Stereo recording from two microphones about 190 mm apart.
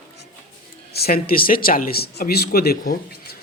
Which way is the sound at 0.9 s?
55° left (ahead or behind).